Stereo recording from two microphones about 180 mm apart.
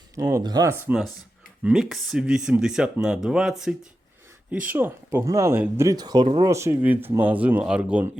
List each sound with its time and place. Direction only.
0.2 s speech: 20° right (ahead or behind)